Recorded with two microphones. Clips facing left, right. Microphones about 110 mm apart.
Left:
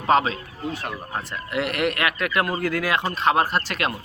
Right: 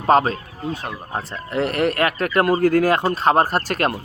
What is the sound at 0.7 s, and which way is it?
Speech, 20° right (ahead or behind).